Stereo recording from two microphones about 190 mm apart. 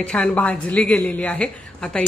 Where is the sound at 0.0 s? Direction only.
5° left (ahead or behind).